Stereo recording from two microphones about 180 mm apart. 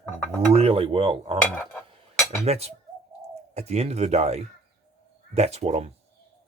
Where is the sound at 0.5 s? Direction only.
35° right (ahead or behind).